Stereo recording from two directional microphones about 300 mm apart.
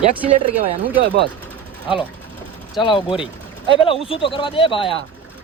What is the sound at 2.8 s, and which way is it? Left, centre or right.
Speech, centre.